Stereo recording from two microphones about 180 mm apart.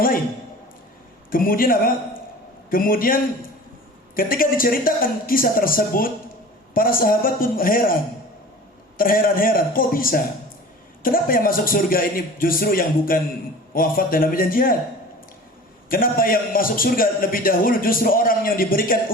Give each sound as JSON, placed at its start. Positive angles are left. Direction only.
{"t": 1.3, "sound": "a man's voice", "side_deg": 50}
{"t": 9.0, "sound": "a man's voice", "side_deg": 50}
{"t": 15.9, "sound": "a man's voice", "side_deg": 50}